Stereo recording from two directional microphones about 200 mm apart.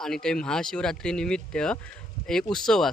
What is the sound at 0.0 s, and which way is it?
A man's voice, 5° left (ahead or behind).